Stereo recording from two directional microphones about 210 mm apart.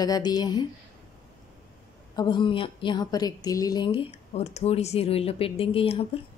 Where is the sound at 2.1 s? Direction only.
20° left (ahead or behind).